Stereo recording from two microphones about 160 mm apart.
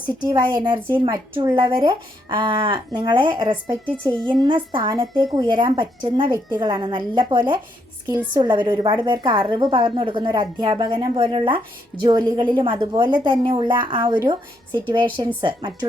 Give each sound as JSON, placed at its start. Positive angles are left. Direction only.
{"t": 0.2, "sound": "a woman's voice", "side_deg": -25}